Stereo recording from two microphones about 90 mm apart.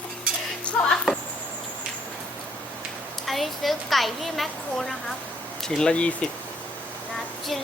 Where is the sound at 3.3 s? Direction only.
Centre (ahead or behind).